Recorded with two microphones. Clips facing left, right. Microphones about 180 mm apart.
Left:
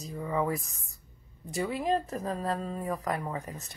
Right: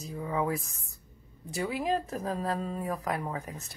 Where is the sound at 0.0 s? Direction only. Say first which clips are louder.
Left 1 dB; centre (ahead or behind).